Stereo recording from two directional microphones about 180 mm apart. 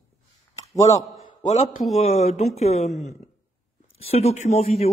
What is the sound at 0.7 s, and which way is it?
Speech, 20° left (ahead or behind).